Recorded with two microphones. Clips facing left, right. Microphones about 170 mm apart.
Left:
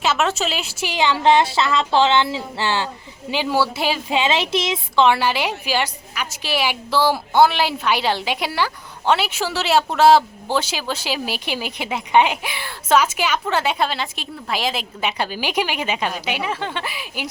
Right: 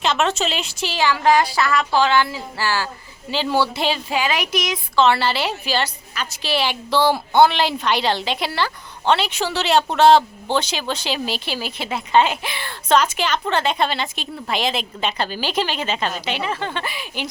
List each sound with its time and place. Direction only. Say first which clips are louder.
0.0 s speech: even; 5° left (ahead or behind)
0.9 s speech: left 1 dB; 20° left (ahead or behind)
4.1 s speech: left 2 dB; 25° left (ahead or behind)
5.0 s a woman's voice: left 1 dB; 15° left (ahead or behind)